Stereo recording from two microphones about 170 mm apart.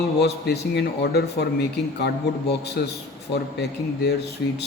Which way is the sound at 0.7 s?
70° left (ahead or behind).